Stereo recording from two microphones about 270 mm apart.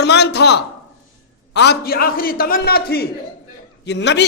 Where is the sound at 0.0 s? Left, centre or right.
Left.